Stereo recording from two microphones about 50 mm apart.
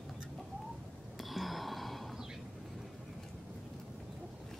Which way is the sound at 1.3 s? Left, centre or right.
Centre.